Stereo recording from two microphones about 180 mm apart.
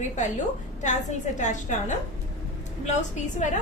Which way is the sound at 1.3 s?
40° left (ahead or behind).